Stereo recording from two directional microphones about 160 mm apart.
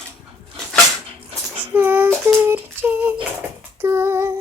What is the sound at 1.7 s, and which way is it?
Child singing, 15° right (ahead or behind).